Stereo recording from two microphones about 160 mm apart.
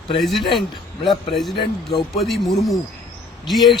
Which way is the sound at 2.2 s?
Centre (ahead or behind).